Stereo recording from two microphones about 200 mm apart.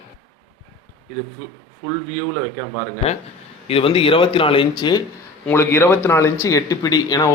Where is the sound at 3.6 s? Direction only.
30° left (ahead or behind).